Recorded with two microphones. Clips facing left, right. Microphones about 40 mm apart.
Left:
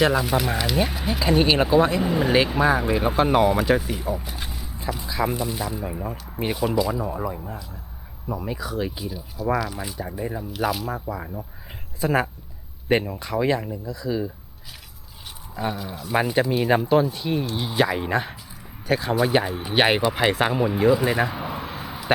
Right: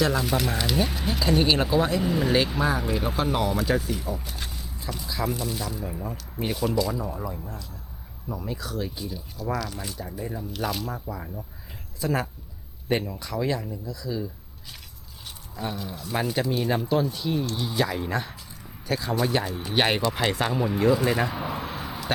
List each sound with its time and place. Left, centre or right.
0.1 s speech: centre
10.5 s speech: centre
10.9 s speech: left
15.7 s speech: centre
16.1 s speech: left; by 22.1 s centre